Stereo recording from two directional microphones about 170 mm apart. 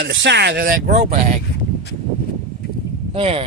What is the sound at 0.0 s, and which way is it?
Speech, 90° right.